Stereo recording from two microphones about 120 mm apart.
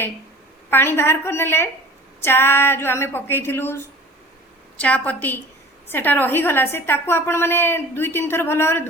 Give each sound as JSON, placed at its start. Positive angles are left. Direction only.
{"t": 0.7, "sound": "a woman's voice", "side_deg": 20}
{"t": 4.8, "sound": "a woman's voice", "side_deg": 10}